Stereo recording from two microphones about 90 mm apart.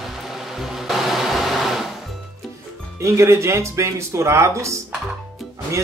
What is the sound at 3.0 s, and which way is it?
Speech, 30° right (ahead or behind).